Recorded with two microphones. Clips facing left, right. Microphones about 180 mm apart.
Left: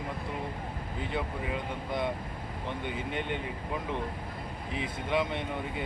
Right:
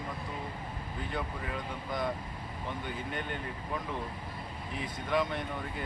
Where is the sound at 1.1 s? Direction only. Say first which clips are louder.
Left 3 dB; 25° left (ahead or behind).